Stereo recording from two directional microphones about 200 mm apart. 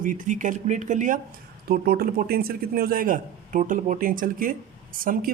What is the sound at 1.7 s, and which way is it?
A man's voice, 50° right (ahead or behind).